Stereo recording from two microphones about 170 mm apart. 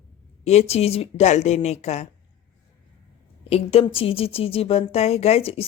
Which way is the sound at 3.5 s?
35° left (ahead or behind).